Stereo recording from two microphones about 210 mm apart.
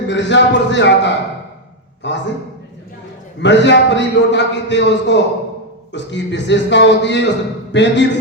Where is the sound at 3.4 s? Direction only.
55° left (ahead or behind).